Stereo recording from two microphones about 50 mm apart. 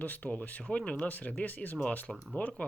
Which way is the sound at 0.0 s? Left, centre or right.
Left.